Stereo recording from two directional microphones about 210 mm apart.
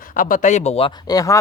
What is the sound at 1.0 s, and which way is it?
Speech, 15° left (ahead or behind).